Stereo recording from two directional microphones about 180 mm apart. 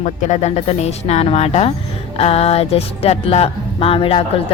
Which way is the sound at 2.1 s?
35° left (ahead or behind).